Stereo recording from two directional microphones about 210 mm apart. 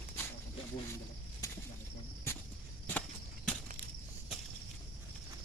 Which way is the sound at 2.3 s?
10° left (ahead or behind).